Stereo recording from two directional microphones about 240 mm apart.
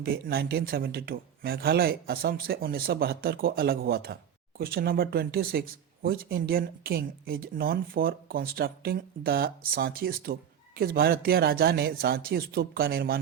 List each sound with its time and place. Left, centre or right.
0.0 s speech: right